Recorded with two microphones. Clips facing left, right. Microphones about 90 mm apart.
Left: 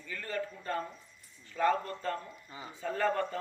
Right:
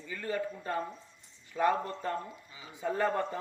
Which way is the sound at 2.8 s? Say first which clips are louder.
Right 1 dB; 15° right (ahead or behind).